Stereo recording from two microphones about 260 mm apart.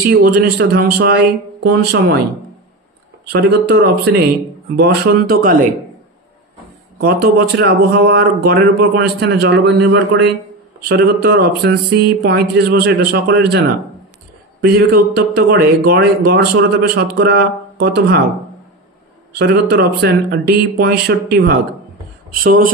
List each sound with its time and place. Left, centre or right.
0.1 s speech: right
3.3 s speech: right
7.0 s speech: right
10.9 s speech: right
19.3 s speech: right